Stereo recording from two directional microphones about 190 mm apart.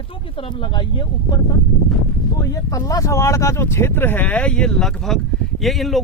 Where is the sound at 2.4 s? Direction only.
15° left (ahead or behind).